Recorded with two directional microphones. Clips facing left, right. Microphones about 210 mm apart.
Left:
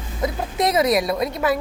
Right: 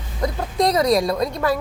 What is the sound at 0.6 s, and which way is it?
Speech, 20° left (ahead or behind).